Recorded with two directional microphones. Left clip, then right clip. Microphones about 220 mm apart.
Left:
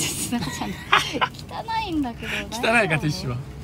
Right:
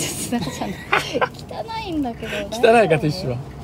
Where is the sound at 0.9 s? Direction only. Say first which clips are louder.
Even; 15° left (ahead or behind).